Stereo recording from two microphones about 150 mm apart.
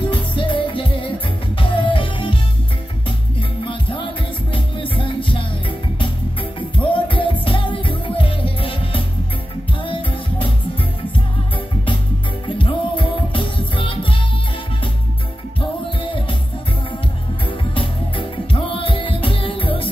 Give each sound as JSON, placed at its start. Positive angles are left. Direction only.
{"t": 0.0, "sound": "music", "side_deg": 35}
{"t": 3.3, "sound": "music", "side_deg": 35}
{"t": 6.8, "sound": "music", "side_deg": 35}
{"t": 11.5, "sound": "music", "side_deg": 35}
{"t": 16.0, "sound": "music", "side_deg": 35}
{"t": 17.7, "sound": "music", "side_deg": 35}